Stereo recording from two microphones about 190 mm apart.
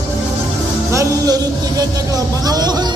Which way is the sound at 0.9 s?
20° right (ahead or behind).